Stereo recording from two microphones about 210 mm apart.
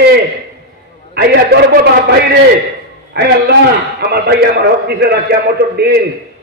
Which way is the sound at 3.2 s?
50° right (ahead or behind).